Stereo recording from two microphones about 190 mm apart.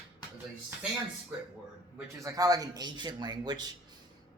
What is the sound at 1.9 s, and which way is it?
Speech, 15° right (ahead or behind).